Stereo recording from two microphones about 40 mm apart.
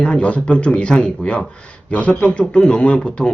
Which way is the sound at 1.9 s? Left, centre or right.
Left.